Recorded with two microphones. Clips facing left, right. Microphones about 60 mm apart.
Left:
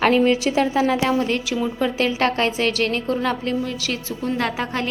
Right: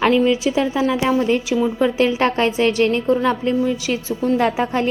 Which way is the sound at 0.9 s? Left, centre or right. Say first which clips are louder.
Right 3 dB; centre.